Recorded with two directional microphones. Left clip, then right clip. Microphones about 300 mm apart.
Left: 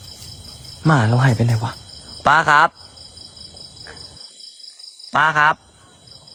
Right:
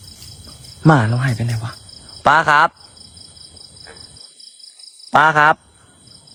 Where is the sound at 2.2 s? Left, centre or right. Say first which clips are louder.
Right 1 dB; centre.